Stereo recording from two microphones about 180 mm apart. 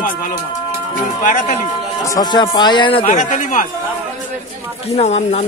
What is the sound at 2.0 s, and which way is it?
Speech, 20° left (ahead or behind).